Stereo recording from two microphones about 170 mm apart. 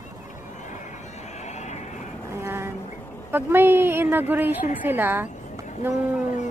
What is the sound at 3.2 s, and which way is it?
A woman's voice, 15° right (ahead or behind).